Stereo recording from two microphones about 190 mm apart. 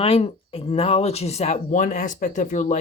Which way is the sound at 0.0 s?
30° left (ahead or behind).